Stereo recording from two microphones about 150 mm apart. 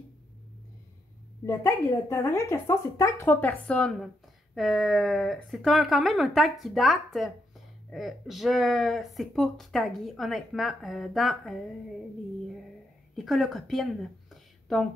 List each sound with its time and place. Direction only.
1.4 s a woman's voice: 20° left (ahead or behind); by 11.5 s centre (ahead or behind)
13.1 s a woman's voice: centre (ahead or behind)